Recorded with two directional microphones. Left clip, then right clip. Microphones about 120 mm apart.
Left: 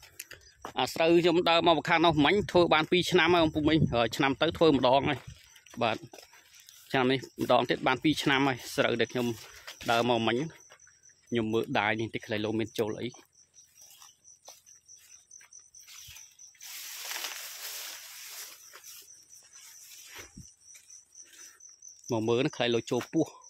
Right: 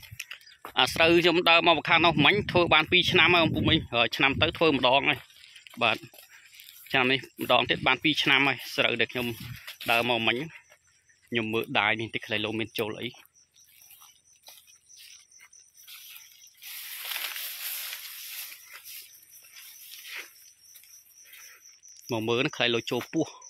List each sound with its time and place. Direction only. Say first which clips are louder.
0.2 s a sound: right 7 dB; 45° left (ahead or behind)
0.6 s speech: right 5 dB; 15° left (ahead or behind)
1.4 s speech: right 3 dB; 25° left (ahead or behind); by 5.7 s 40° left (ahead or behind)
6.9 s speech: right 3 dB; 35° left (ahead or behind)
9.3 s a sound: even; 20° left (ahead or behind)
10.0 s speech: right 2 dB; 50° left (ahead or behind)
11.2 s speech: right 1 dB; 30° left (ahead or behind)
22.0 s speech: right 1 dB; 25° left (ahead or behind)